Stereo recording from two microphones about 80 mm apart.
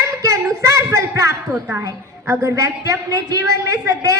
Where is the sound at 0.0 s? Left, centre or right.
Right.